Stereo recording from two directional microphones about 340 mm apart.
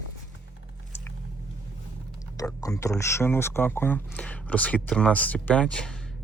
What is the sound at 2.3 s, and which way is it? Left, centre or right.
Speech, centre.